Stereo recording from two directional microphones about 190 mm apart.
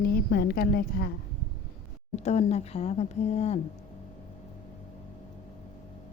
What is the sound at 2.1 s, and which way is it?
Speech, 35° left (ahead or behind).